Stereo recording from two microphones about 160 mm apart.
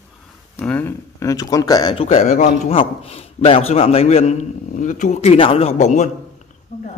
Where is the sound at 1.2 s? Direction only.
20° left (ahead or behind).